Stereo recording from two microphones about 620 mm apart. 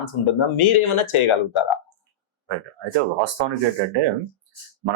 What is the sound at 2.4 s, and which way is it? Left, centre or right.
Speech, right.